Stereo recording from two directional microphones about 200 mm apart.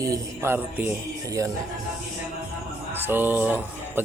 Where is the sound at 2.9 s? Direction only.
10° right (ahead or behind).